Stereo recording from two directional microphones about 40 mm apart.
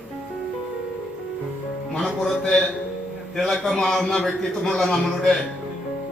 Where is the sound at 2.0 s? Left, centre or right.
Centre.